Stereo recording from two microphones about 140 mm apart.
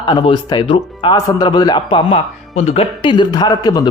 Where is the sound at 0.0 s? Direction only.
35° left (ahead or behind).